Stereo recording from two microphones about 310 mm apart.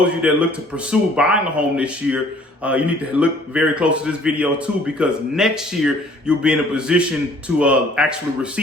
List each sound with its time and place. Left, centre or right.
0.0 s a man's voice: centre